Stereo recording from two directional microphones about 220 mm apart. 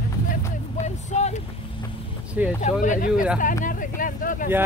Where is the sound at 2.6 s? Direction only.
35° left (ahead or behind).